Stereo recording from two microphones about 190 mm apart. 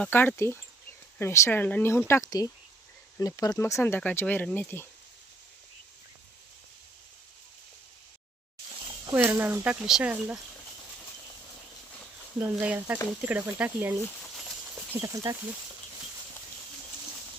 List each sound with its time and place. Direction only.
0.0 s speech: 10° left (ahead or behind)
9.1 s speech: 10° right (ahead or behind)
12.4 s speech: 10° right (ahead or behind)